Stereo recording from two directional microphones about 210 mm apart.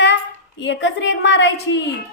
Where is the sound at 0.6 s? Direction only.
60° left (ahead or behind).